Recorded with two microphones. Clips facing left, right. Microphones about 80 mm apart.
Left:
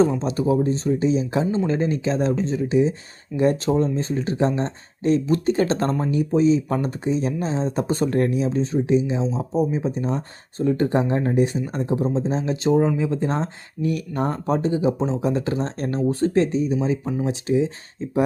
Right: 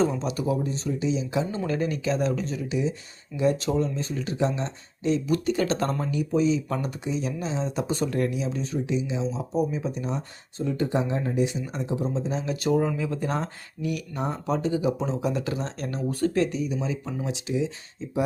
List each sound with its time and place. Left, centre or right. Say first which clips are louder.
0.2 s speech: left 6 dB; left
1.5 s speech: left 5 dB; left